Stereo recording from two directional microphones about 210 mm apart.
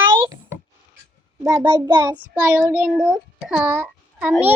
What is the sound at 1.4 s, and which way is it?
Child singing, 15° right (ahead or behind).